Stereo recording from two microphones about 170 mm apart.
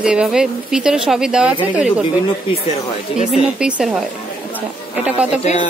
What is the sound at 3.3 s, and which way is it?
Speech, 5° right (ahead or behind).